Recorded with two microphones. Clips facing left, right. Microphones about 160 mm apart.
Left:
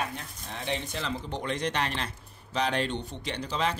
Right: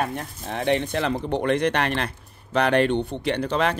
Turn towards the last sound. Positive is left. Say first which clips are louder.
# right 8 dB
turn(degrees=-60)  # may be behind; listen again after turning